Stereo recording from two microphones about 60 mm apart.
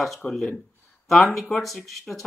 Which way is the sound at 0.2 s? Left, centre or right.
Centre.